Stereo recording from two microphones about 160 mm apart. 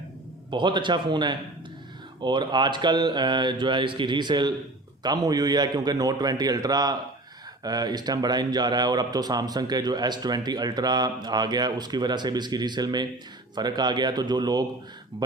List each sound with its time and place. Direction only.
0.5 s speech: 30° right (ahead or behind)